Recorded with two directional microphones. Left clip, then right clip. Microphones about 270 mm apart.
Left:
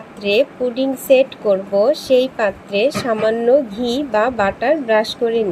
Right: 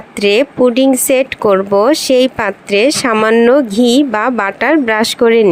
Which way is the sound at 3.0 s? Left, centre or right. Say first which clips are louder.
Right 7 dB; right.